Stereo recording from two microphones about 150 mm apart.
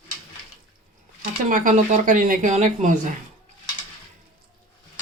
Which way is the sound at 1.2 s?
60° right (ahead or behind).